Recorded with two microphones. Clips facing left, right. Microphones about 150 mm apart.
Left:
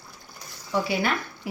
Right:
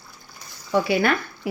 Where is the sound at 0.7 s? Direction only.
65° right (ahead or behind).